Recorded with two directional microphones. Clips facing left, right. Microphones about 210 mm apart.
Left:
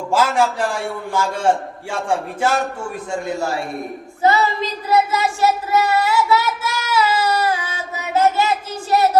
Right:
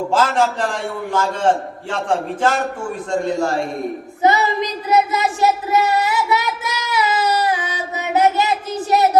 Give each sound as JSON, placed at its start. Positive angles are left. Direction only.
{"t": 0.1, "sound": "a man's voice", "side_deg": 10}
{"t": 4.2, "sound": "child singing", "side_deg": -20}